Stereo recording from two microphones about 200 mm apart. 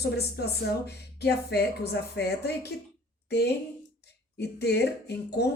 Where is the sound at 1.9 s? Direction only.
55° left (ahead or behind).